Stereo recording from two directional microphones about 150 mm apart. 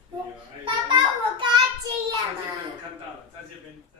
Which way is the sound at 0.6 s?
30° right (ahead or behind).